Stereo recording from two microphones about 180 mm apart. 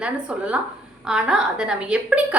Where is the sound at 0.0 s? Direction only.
5° right (ahead or behind).